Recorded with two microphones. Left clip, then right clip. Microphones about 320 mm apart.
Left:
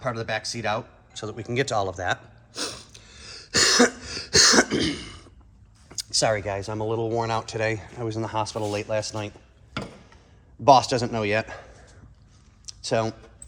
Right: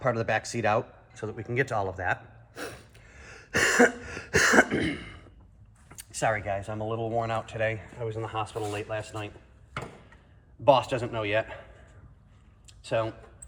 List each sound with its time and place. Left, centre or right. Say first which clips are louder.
0.0 s speech: right 1 dB; centre
10.6 s speech: left 5 dB; centre
12.9 s speech: left 4 dB; left